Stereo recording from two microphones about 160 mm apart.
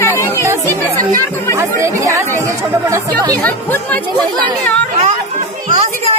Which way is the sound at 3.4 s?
10° left (ahead or behind).